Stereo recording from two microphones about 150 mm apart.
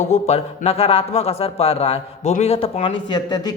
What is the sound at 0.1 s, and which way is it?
Speech, 45° left (ahead or behind).